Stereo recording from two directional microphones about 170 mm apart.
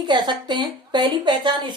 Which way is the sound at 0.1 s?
25° right (ahead or behind).